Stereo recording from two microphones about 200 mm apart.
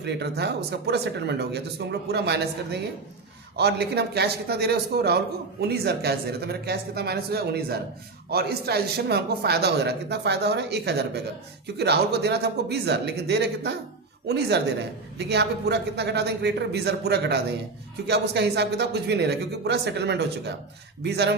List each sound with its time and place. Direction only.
0.0 s a man's voice: 55° right (ahead or behind)
3.6 s a man's voice: 55° right (ahead or behind)